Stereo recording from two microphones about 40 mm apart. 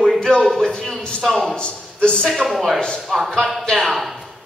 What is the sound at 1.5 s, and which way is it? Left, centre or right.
Speech, left.